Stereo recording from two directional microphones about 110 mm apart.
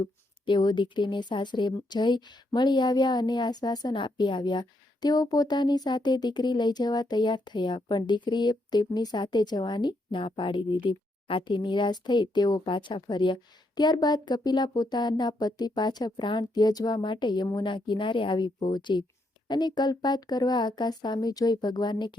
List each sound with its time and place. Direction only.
0.4 s speech: 45° left (ahead or behind)